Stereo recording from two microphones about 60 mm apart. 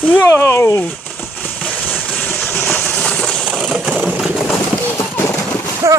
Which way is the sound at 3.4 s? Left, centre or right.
Centre.